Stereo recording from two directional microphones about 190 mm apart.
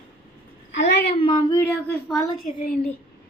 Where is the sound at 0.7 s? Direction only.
65° left (ahead or behind).